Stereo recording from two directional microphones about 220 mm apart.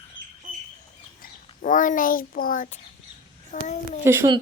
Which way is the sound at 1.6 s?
35° left (ahead or behind).